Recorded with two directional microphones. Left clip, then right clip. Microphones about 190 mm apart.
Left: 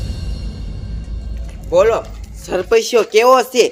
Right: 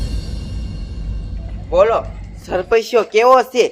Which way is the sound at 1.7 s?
40° left (ahead or behind).